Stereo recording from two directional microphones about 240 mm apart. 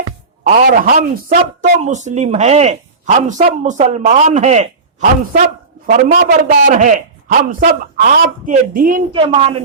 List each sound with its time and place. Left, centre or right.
0.4 s a woman's voice: right
9.1 s a woman's voice: right